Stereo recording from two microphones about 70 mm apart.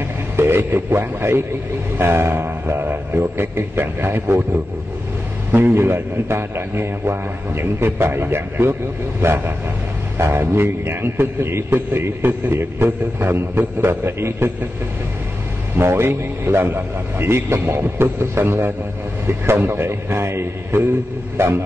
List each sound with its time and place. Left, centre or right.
0.4 s a man's voice: right
5.5 s a man's voice: right
10.1 s a man's voice: right
15.8 s a man's voice: right